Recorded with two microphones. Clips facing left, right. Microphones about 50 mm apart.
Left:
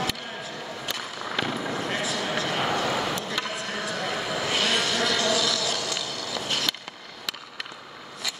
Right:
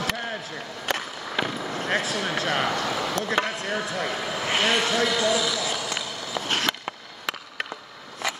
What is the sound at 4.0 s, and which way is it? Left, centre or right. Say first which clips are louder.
Vehicle: even; right.